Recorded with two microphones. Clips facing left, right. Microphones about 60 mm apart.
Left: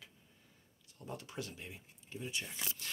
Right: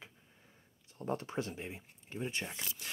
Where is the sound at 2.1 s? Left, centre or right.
Right.